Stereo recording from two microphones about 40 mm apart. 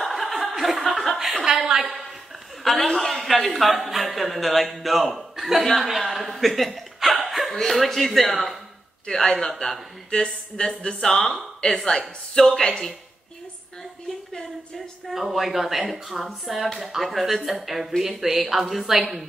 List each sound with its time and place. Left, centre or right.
0.1 s chuckle: centre
1.4 s a woman's voice: centre
2.6 s a man's voice: centre
5.8 s chuckle: centre
7.5 s a man's voice: centre
9.0 s speech: centre
15.0 s a man's voice: centre